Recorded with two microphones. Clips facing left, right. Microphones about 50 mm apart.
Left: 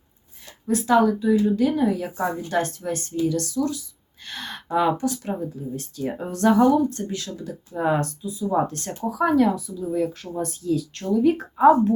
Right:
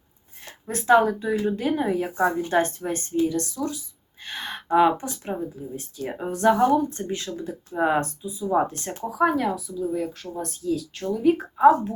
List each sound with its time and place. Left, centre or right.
0.4 s a woman's voice: right
4.2 s sigh: right
4.9 s a woman's voice: right
5.6 s a woman's voice: centre
6.9 s a woman's voice: right; by 11.4 s centre
11.5 s a woman's voice: centre